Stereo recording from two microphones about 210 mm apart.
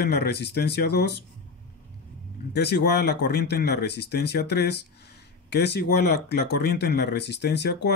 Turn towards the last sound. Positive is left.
turn(degrees=55)  # may be behind; listen again after turning